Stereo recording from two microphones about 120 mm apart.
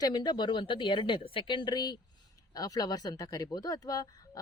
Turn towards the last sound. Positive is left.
turn(degrees=30)  # may be behind; listen again after turning